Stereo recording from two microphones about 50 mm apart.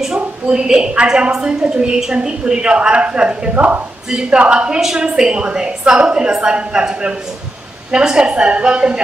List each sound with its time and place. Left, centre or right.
0.0 s a woman's voice: centre
4.1 s a woman's voice: centre
4.7 s a woman's voice: centre